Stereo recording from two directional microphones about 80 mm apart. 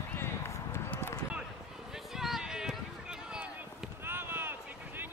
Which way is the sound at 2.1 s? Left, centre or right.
Centre.